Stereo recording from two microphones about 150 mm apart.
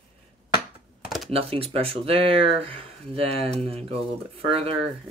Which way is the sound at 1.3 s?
40° right (ahead or behind).